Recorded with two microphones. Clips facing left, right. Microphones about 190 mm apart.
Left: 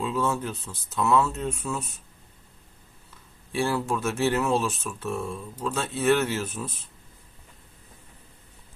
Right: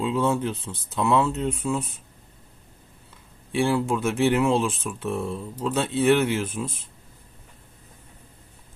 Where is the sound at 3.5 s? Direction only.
15° right (ahead or behind).